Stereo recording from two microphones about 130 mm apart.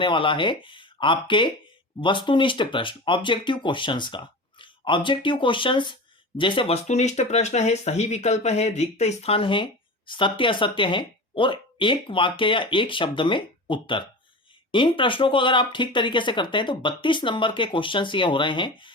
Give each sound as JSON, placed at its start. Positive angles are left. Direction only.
{"t": 0.0, "sound": "speech", "side_deg": 40}
{"t": 6.8, "sound": "speech", "side_deg": 60}